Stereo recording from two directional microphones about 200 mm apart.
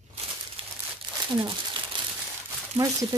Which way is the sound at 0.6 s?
25° right (ahead or behind).